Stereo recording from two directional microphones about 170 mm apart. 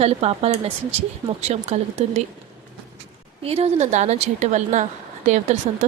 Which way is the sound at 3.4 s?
35° right (ahead or behind).